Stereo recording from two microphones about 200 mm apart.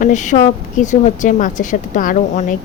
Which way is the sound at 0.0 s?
40° left (ahead or behind).